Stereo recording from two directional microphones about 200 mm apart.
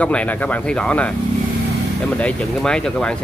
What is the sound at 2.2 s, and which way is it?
Speech, 5° left (ahead or behind).